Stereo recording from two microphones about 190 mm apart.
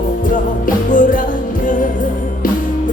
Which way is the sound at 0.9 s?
45° left (ahead or behind).